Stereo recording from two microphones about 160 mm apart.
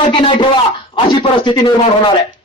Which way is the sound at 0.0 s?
35° left (ahead or behind).